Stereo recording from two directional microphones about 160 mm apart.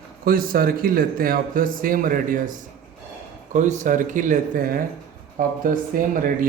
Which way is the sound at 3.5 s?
50° right (ahead or behind).